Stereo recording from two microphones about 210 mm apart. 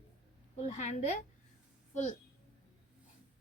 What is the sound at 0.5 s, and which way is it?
Speech, 35° left (ahead or behind).